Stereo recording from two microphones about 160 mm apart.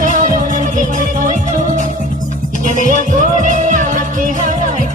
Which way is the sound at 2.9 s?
50° right (ahead or behind).